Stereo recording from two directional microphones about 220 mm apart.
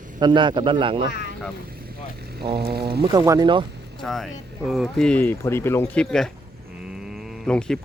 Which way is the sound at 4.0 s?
Centre (ahead or behind).